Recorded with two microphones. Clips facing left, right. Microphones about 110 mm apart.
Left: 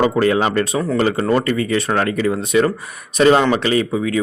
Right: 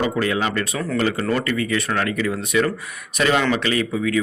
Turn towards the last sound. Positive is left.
turn(degrees=30)  # may be behind; listen again after turning